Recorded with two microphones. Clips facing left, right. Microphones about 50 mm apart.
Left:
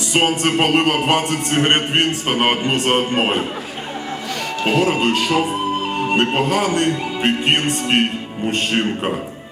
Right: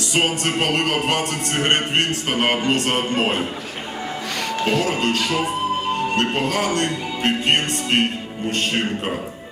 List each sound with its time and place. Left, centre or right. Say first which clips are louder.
0.1 s speech: left 4 dB; left
4.6 s speech: left 4 dB; left